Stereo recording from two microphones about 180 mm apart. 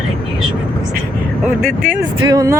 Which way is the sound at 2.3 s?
20° right (ahead or behind).